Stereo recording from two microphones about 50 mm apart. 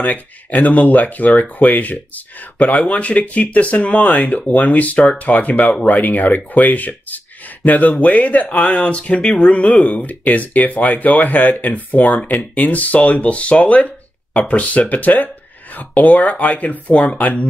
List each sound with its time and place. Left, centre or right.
0.0 s speech: left